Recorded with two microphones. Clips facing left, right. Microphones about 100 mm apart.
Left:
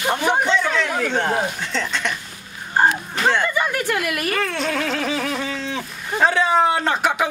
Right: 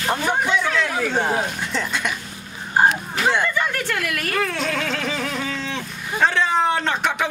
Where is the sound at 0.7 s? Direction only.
Centre (ahead or behind).